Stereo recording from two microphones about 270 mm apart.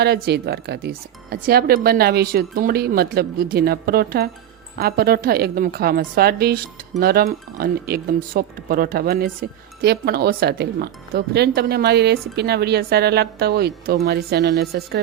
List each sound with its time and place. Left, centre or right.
0.0 s speech: right